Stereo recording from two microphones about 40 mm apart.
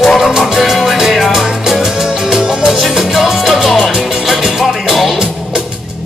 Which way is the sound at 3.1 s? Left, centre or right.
Centre.